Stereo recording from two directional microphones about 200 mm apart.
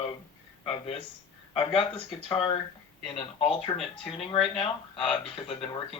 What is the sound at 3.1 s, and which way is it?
Speech, 30° left (ahead or behind).